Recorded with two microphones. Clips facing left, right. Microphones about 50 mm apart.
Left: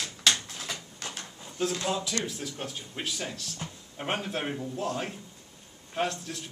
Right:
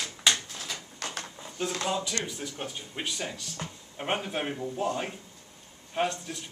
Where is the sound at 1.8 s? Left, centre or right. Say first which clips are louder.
Even; centre.